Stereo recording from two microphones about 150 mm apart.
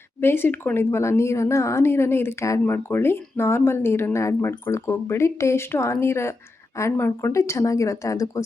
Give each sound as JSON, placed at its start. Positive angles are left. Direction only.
{"t": 0.2, "sound": "a woman's voice", "side_deg": 15}